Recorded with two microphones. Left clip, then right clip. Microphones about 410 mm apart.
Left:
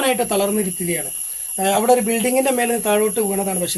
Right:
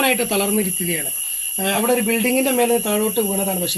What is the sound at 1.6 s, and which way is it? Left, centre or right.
Speech, centre.